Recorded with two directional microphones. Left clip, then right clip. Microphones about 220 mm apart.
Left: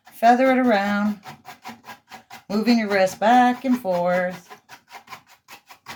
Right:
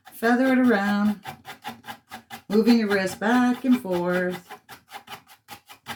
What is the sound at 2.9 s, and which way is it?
Speech, 20° left (ahead or behind).